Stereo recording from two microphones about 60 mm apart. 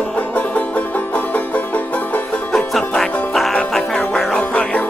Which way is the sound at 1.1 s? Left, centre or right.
Left.